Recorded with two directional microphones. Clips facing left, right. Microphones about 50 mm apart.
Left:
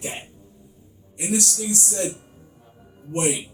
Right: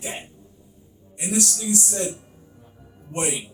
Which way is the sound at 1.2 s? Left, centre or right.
Left.